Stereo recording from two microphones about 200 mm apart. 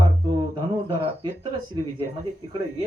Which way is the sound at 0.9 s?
25° right (ahead or behind).